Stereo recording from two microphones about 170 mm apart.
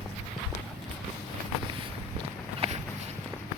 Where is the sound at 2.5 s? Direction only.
40° right (ahead or behind).